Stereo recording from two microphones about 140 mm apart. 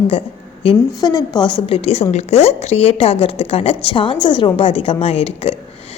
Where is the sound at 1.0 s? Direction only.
30° left (ahead or behind); by 5.5 s 45° left (ahead or behind).